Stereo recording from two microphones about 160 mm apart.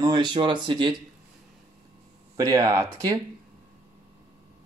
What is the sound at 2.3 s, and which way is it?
Speech, 20° right (ahead or behind).